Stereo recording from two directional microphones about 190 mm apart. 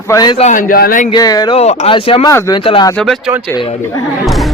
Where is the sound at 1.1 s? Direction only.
20° left (ahead or behind).